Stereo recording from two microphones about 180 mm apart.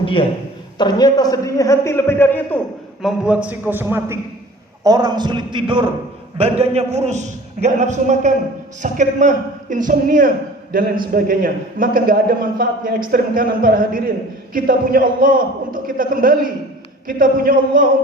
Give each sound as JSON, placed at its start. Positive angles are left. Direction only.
{"t": 0.0, "sound": "a man's voice", "side_deg": 30}
{"t": 3.0, "sound": "a man's voice", "side_deg": -5}